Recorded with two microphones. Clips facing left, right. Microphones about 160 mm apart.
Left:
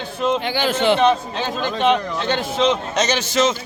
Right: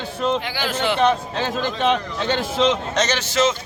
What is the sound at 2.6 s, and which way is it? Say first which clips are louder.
Speech: left 1 dB; centre (ahead or behind).